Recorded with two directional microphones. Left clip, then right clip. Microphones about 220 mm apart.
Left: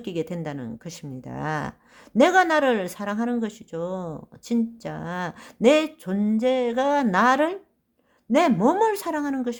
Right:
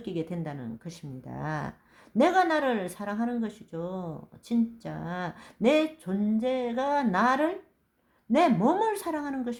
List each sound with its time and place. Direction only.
0.0 s speech: 35° left (ahead or behind)